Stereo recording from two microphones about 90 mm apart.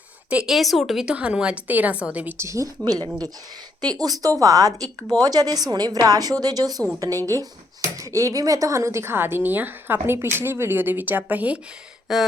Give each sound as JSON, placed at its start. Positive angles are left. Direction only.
{"t": 0.3, "sound": "speech", "side_deg": -10}
{"t": 0.5, "sound": "a woman's voice", "side_deg": 0}
{"t": 2.4, "sound": "speech", "side_deg": -35}
{"t": 2.8, "sound": "a woman's voice", "side_deg": -50}